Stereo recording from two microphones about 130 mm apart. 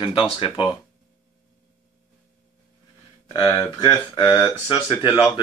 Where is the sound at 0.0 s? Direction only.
40° left (ahead or behind).